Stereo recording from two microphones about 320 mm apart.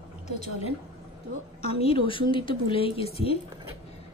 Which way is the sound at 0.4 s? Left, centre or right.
Centre.